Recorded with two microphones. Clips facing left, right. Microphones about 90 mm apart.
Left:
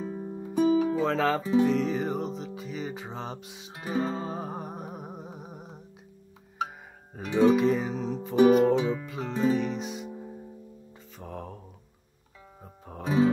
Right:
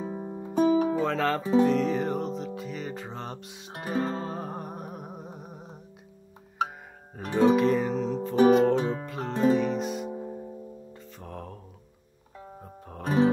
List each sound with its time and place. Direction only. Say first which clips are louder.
0.0 s music: right 1 dB; 20° right (ahead or behind)
1.0 s speech: left 1 dB; 5° left (ahead or behind)
1.6 s music: right 3 dB; centre (ahead or behind)
7.3 s music: even; centre (ahead or behind)
8.4 s music: even; 30° right (ahead or behind)
9.4 s music: right 3 dB; 5° right (ahead or behind)
10.1 s music: right 5 dB; 15° right (ahead or behind)
11.1 s mantra: left 2 dB; centre (ahead or behind)
12.8 s music: even; 5° left (ahead or behind)